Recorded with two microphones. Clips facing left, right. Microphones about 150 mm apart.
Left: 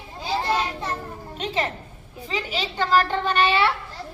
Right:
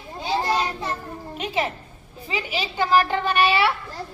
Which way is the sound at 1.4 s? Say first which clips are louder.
Right 1 dB; 10° right (ahead or behind).